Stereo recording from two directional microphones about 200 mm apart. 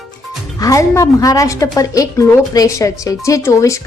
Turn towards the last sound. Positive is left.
turn(degrees=15)  # may be behind; listen again after turning